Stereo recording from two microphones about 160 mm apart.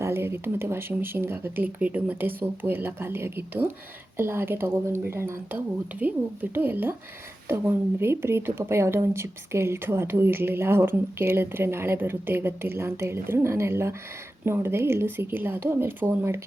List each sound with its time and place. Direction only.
0.0 s speech: 15° right (ahead or behind)